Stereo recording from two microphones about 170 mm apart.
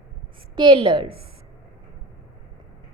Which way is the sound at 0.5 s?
25° right (ahead or behind).